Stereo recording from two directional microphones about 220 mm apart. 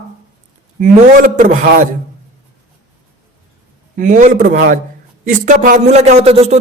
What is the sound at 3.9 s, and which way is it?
A man's voice, 35° right (ahead or behind).